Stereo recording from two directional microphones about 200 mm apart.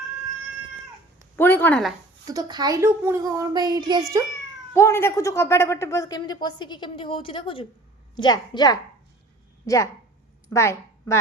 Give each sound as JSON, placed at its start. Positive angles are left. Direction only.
{"t": 1.4, "sound": "speech", "side_deg": 10}
{"t": 2.2, "sound": "a child's voice", "side_deg": -20}
{"t": 4.7, "sound": "a woman's voice", "side_deg": 15}